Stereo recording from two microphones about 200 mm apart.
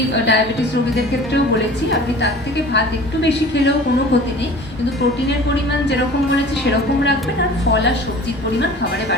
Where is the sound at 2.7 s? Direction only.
60° left (ahead or behind).